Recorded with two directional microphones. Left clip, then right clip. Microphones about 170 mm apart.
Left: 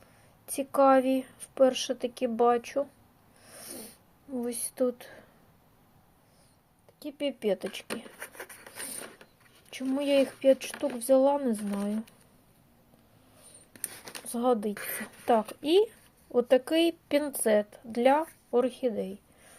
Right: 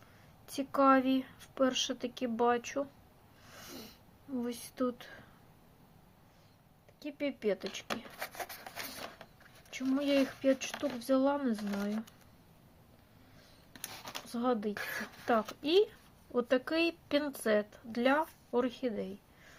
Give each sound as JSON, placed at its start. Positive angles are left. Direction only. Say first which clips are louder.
{"t": 0.4, "sound": "speech", "louder": "left 5 dB", "side_deg": 10}
{"t": 3.4, "sound": "a sound", "louder": "left 3 dB", "side_deg": 10}
{"t": 4.4, "sound": "speech", "louder": "left 6 dB", "side_deg": 10}
{"t": 7.0, "sound": "speech", "louder": "left 4 dB", "side_deg": 20}
{"t": 8.2, "sound": "wood", "louder": "right 2 dB", "side_deg": -40}
{"t": 9.6, "sound": "speech", "louder": "left 4 dB", "side_deg": 20}
{"t": 14.3, "sound": "speech", "louder": "left 6 dB", "side_deg": 15}